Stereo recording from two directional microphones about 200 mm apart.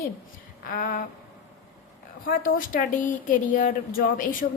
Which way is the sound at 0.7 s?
45° left (ahead or behind).